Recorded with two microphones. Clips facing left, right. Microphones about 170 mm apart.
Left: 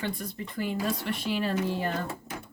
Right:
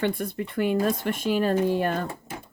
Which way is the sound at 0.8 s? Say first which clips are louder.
Right 5 dB; 50° right (ahead or behind).